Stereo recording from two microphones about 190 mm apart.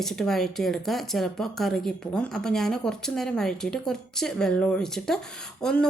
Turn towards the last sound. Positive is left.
turn(degrees=5)  # may be behind; listen again after turning